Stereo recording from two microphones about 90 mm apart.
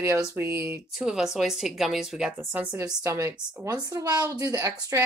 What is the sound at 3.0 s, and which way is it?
Speech, 30° right (ahead or behind).